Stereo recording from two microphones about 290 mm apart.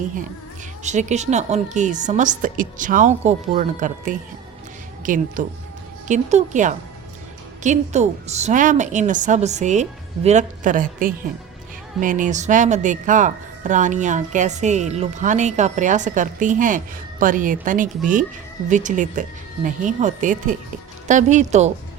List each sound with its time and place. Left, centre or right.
0.8 s speech: right